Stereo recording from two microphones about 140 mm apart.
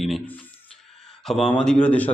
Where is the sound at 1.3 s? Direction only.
5° left (ahead or behind).